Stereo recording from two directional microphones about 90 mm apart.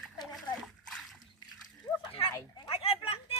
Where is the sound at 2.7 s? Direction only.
90° left.